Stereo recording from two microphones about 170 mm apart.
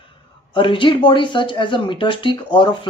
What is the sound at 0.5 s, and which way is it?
Speech, 30° left (ahead or behind).